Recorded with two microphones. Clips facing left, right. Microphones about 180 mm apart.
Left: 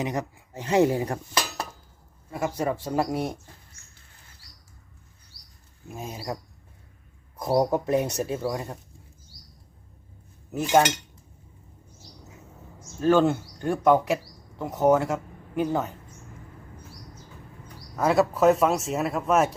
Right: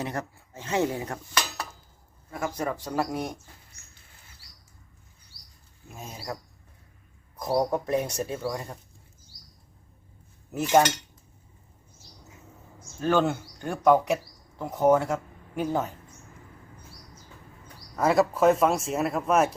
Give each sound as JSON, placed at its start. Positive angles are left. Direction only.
{"t": 0.0, "sound": "speech", "side_deg": 15}
{"t": 1.0, "sound": "cutlery", "side_deg": 30}
{"t": 2.6, "sound": "speech", "side_deg": 10}
{"t": 5.9, "sound": "speech", "side_deg": 10}
{"t": 7.6, "sound": "speech", "side_deg": 5}
{"t": 10.7, "sound": "speech", "side_deg": 5}
{"t": 13.0, "sound": "speech", "side_deg": 0}
{"t": 17.9, "sound": "speech", "side_deg": 0}